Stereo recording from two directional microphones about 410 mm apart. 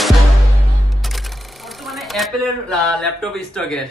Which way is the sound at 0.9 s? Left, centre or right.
Centre.